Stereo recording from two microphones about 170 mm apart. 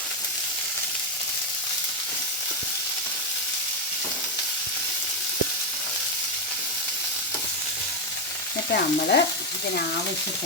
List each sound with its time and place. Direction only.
8.7 s stir: 65° left (ahead or behind)